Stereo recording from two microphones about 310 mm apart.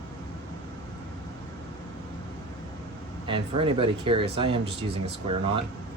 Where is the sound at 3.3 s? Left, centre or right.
Centre.